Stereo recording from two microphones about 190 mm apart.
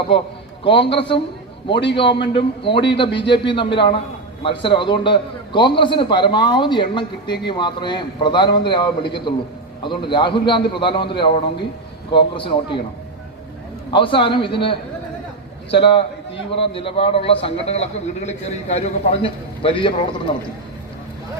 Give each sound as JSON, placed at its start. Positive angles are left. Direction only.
{"t": 0.6, "sound": "a man's voice", "side_deg": 25}
{"t": 13.9, "sound": "a man's voice", "side_deg": 25}